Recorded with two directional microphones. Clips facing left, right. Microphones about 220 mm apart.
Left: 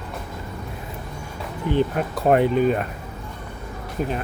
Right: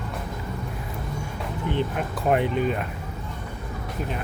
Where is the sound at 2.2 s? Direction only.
45° left (ahead or behind).